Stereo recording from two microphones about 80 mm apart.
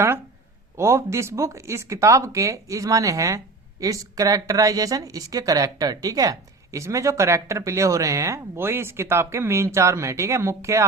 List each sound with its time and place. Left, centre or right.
0.8 s speech: right